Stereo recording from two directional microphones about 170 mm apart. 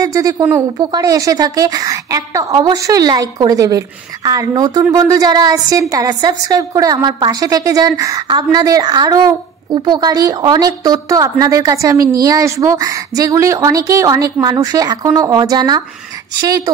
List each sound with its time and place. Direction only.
0.0 s a woman's voice: 20° right (ahead or behind)